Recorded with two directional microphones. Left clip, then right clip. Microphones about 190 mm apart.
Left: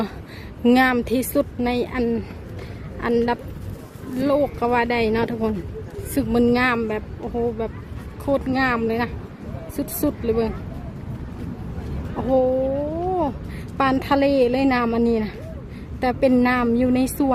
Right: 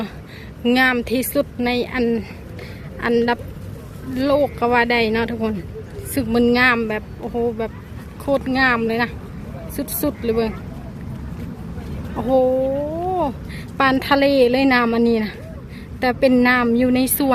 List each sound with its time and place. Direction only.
0.6 s speech: 20° left (ahead or behind)
12.1 s a woman's voice: 5° left (ahead or behind)
13.7 s a woman's voice: 10° left (ahead or behind)